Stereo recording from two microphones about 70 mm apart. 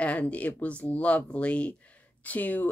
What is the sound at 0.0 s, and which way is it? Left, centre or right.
Speech, centre.